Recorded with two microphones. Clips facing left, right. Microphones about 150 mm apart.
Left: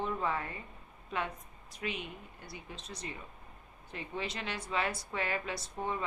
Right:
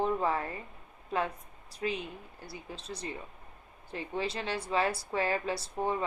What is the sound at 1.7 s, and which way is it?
A woman's voice, 35° right (ahead or behind).